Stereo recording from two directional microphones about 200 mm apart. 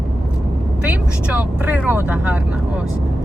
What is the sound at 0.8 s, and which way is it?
Speech, 5° right (ahead or behind).